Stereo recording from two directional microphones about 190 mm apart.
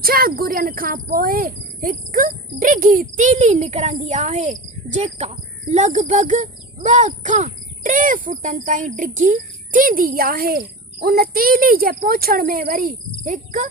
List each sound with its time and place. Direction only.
0.0 s speech: 50° right (ahead or behind)